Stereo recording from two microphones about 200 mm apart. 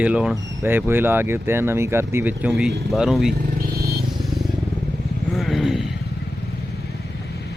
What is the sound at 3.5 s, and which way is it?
Vehicle, 50° right (ahead or behind).